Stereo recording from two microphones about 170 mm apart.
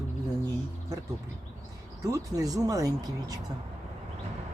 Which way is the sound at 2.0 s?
20° right (ahead or behind).